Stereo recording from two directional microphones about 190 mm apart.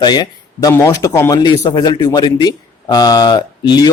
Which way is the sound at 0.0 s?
20° left (ahead or behind).